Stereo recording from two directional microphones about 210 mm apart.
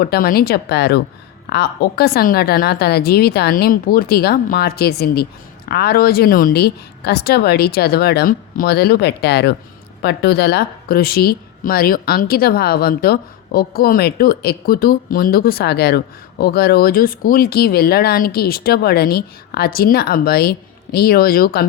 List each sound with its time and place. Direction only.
0.0 s a woman's voice: 45° left (ahead or behind)